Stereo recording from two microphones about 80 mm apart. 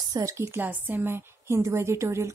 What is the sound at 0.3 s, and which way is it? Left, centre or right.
A woman's voice, right.